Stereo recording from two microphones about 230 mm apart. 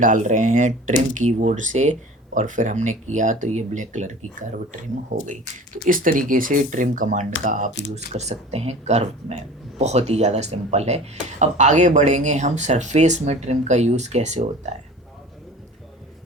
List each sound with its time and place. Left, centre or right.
0.0 s speech: right